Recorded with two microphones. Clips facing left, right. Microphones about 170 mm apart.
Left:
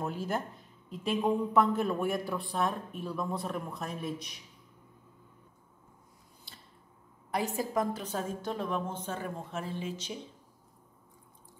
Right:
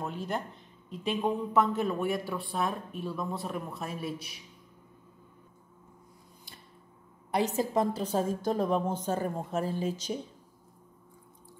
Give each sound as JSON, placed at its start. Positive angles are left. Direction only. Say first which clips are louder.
{"t": 0.0, "sound": "a man's voice", "louder": "left 1 dB", "side_deg": 5}
{"t": 7.3, "sound": "a woman's voice", "louder": "right 3 dB", "side_deg": -20}